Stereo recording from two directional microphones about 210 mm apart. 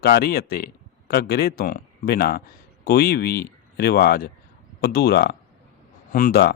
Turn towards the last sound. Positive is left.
turn(degrees=45)  # may be behind; listen again after turning